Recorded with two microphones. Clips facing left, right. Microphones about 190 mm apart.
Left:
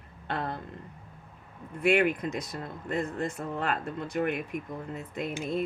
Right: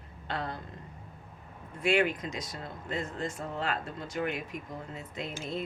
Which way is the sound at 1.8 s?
55° left (ahead or behind).